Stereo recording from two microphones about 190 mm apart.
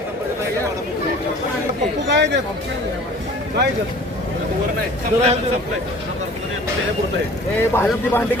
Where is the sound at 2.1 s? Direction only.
65° right (ahead or behind).